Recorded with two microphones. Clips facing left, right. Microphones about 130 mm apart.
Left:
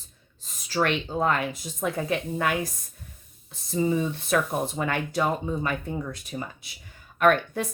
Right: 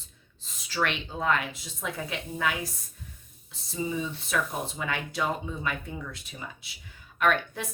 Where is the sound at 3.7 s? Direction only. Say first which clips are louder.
Left 7 dB; 50° left (ahead or behind).